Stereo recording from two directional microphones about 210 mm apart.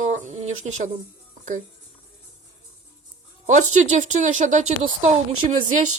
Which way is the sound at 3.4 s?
35° right (ahead or behind).